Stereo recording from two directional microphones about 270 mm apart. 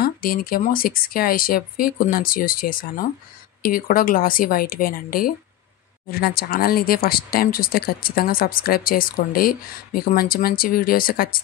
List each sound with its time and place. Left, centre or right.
0.0 s speech: left